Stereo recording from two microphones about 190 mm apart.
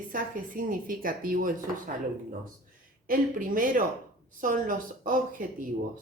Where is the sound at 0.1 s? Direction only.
45° right (ahead or behind).